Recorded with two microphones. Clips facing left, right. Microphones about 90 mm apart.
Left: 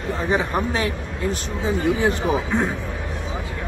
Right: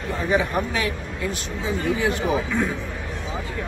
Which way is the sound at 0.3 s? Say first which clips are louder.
Even; 35° left (ahead or behind).